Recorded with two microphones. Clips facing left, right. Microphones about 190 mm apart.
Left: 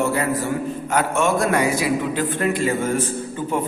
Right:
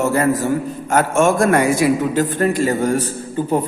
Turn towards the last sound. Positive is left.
turn(degrees=-35)  # may be behind; listen again after turning